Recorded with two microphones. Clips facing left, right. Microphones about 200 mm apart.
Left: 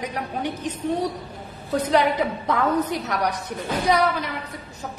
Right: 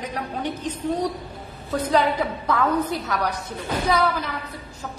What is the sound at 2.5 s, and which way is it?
Speech, 15° left (ahead or behind).